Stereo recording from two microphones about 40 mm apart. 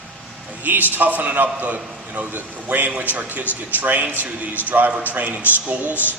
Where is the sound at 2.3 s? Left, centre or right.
Right.